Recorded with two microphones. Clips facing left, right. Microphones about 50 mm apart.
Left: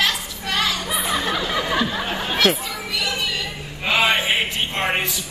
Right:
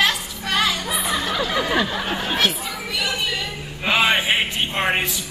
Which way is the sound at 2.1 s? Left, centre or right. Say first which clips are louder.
Even; centre.